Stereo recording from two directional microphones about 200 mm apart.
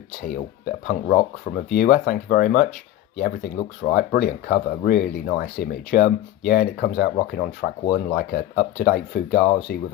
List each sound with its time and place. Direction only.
0.2 s speech: 50° left (ahead or behind)